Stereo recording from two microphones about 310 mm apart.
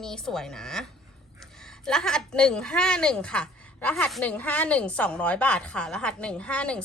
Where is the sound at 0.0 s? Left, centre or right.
Centre.